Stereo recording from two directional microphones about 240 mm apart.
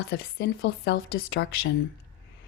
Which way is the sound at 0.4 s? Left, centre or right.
Left.